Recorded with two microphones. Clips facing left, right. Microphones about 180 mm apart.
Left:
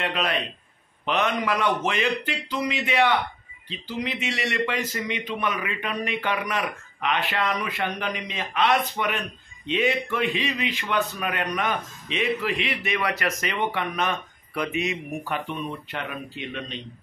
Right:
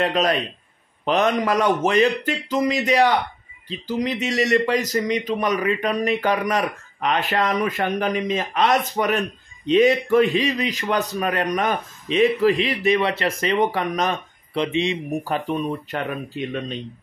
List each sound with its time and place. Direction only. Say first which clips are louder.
0.0 s speech: right 6 dB; 40° right (ahead or behind)
14.5 s speech: right 5 dB; 25° right (ahead or behind); by 16.7 s 45° right (ahead or behind)